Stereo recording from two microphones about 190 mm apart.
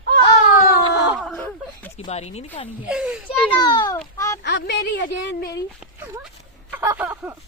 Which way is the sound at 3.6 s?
20° left (ahead or behind).